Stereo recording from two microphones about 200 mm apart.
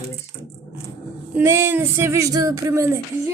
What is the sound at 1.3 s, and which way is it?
Speech, 10° right (ahead or behind).